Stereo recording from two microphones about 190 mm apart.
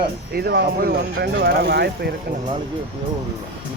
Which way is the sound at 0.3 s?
55° right (ahead or behind).